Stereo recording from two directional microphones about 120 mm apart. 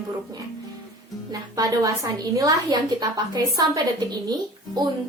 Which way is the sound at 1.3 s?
30° right (ahead or behind).